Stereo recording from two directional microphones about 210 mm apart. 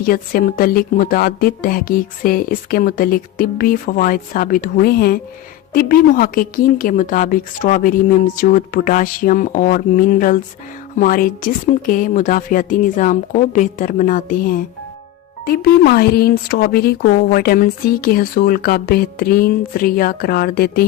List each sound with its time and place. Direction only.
0.0 s speech: 45° left (ahead or behind)